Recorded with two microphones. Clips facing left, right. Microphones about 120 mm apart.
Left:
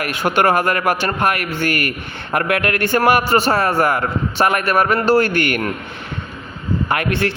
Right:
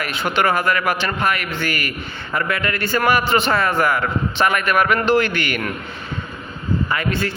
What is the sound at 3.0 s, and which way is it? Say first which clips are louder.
A man's voice: left 2 dB; 45° left (ahead or behind).